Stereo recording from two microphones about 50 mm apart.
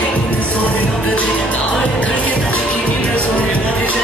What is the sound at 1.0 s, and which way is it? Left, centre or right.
Music, left.